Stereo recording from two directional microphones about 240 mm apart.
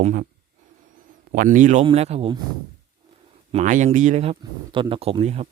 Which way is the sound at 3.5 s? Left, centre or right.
Right.